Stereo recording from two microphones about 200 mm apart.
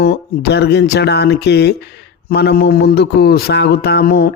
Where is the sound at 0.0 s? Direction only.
55° left (ahead or behind).